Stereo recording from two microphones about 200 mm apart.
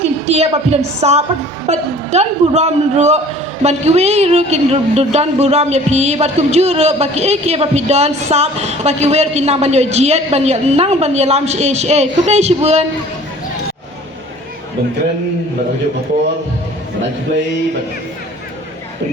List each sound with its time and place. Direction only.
0.0 s a woman's voice: 30° right (ahead or behind)